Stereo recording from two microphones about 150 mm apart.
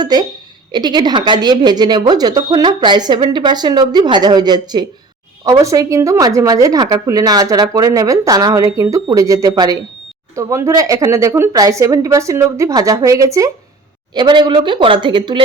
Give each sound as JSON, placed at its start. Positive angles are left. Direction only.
{"t": 0.0, "sound": "a woman's voice", "side_deg": -30}